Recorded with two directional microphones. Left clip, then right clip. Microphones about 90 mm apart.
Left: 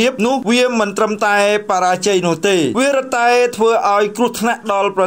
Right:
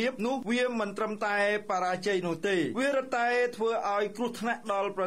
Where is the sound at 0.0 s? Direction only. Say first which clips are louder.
Left 15 dB; 45° left (ahead or behind).